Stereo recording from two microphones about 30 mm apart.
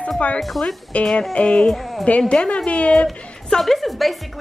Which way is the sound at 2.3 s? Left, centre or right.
Left.